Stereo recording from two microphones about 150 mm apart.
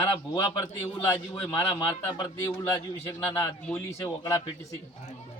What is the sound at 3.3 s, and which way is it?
Speech, 20° left (ahead or behind).